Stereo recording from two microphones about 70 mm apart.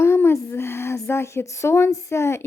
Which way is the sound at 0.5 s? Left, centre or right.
Left.